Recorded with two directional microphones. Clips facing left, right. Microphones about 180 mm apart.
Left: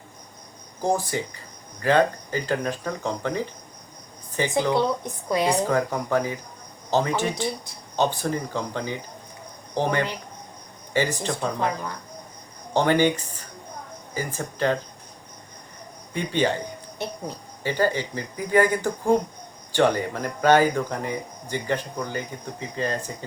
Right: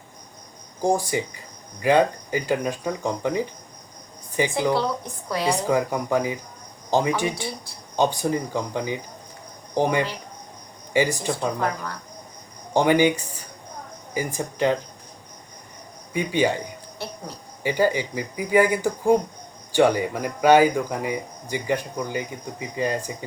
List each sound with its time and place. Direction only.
0.8 s speech: 15° right (ahead or behind)
11.6 s speech: 20° left (ahead or behind)
12.7 s speech: 10° right (ahead or behind)
16.1 s speech: 10° right (ahead or behind)
17.0 s a sound: 20° left (ahead or behind)
17.6 s speech: 15° right (ahead or behind)